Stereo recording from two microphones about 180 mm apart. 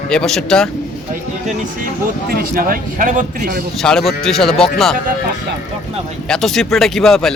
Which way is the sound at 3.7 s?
Centre (ahead or behind).